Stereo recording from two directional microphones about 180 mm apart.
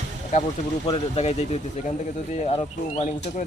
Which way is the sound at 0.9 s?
35° left (ahead or behind).